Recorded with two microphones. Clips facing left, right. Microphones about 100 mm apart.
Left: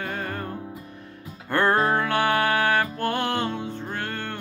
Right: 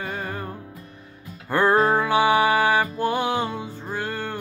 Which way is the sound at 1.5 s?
5° right (ahead or behind).